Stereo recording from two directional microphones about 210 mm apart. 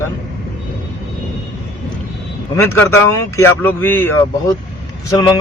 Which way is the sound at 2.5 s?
10° left (ahead or behind).